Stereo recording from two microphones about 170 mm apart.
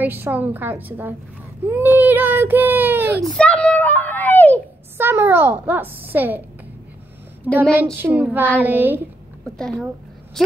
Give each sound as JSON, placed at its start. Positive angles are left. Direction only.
{"t": 0.0, "sound": "speech", "side_deg": -10}
{"t": 3.2, "sound": "a sound", "side_deg": 5}
{"t": 4.9, "sound": "speech", "side_deg": -15}
{"t": 7.7, "sound": "speech", "side_deg": -10}
{"t": 9.6, "sound": "speech", "side_deg": 5}